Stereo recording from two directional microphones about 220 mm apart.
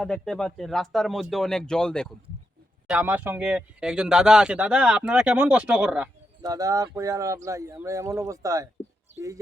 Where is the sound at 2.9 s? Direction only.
5° right (ahead or behind).